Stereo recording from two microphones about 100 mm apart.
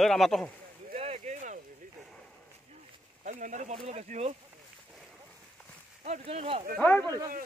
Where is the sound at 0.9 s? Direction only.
90° right.